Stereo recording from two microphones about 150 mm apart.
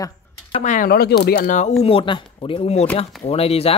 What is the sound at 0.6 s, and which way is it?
Speech, 65° left (ahead or behind).